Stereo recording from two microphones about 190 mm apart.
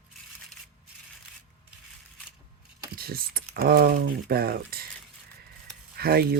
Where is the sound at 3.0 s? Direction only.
55° right (ahead or behind).